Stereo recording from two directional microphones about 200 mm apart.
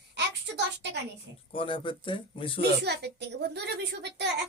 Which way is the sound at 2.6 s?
55° right (ahead or behind).